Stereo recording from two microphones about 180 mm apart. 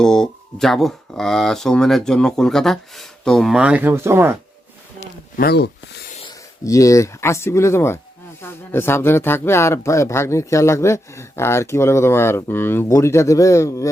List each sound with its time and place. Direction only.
0.0 s speech: 5° left (ahead or behind); by 4.4 s 15° right (ahead or behind)
5.4 s speech: 65° left (ahead or behind)
6.2 s speech: 20° left (ahead or behind)